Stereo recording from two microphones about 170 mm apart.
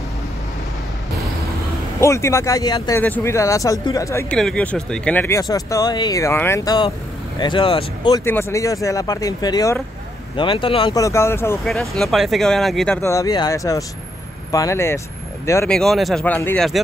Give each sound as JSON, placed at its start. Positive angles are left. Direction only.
{"t": 2.0, "sound": "speech", "side_deg": 15}
{"t": 4.4, "sound": "speech", "side_deg": 5}
{"t": 5.4, "sound": "speech", "side_deg": 20}
{"t": 8.3, "sound": "speech", "side_deg": 15}
{"t": 11.6, "sound": "speech", "side_deg": 0}
{"t": 13.0, "sound": "speech", "side_deg": 20}
{"t": 15.7, "sound": "speech", "side_deg": 0}